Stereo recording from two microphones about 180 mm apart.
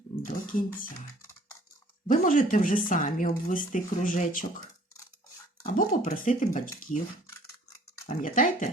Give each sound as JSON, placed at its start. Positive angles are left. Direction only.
{"t": 0.2, "sound": "speech", "side_deg": 50}
{"t": 2.0, "sound": "speech", "side_deg": 45}
{"t": 5.6, "sound": "speech", "side_deg": 45}
{"t": 8.0, "sound": "speech", "side_deg": 45}